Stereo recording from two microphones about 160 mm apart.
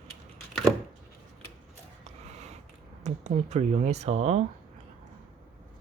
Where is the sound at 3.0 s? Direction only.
45° right (ahead or behind).